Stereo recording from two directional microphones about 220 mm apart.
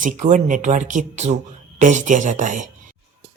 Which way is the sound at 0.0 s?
35° right (ahead or behind).